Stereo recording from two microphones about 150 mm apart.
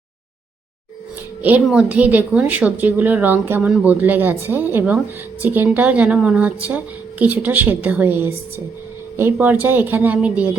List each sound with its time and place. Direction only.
1.4 s speech: 10° right (ahead or behind)